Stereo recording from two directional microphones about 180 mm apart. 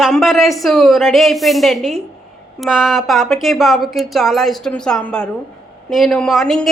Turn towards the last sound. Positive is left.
turn(degrees=0)  # may be behind; listen again after turning